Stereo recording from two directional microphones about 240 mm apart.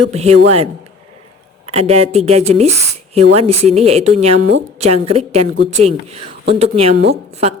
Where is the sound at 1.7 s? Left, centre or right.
Right.